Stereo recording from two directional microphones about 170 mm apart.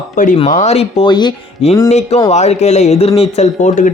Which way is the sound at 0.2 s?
50° left (ahead or behind).